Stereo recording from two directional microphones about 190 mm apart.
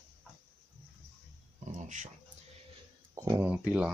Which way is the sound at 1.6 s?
40° right (ahead or behind).